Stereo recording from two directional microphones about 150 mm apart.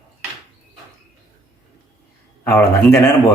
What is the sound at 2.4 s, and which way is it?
Speech, 15° left (ahead or behind).